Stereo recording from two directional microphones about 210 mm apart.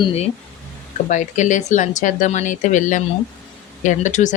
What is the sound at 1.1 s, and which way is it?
Speech, 35° left (ahead or behind).